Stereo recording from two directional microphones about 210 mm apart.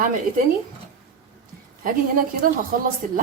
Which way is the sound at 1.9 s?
40° right (ahead or behind).